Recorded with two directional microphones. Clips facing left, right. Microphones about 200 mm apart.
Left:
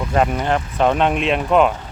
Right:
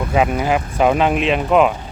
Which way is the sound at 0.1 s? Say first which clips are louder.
Right 1 dB; 5° right (ahead or behind).